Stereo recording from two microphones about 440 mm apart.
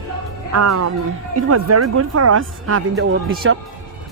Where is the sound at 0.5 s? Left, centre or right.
Right.